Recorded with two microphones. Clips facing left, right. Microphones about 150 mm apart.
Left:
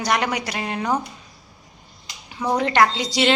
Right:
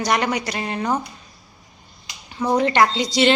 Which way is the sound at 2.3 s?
Centre (ahead or behind).